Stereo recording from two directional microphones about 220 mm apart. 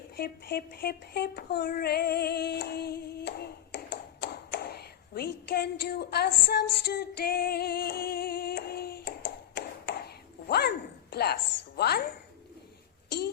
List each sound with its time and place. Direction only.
0.2 s child singing: 45° left (ahead or behind)
5.5 s female singing: 45° left (ahead or behind)
9.6 s ping: 50° left (ahead or behind)
11.1 s a woman's voice: 45° left (ahead or behind)
11.8 s female singing: 45° left (ahead or behind)
13.1 s wail: 45° left (ahead or behind)